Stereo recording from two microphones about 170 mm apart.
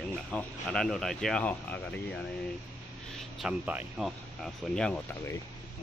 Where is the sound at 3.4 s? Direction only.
5° right (ahead or behind).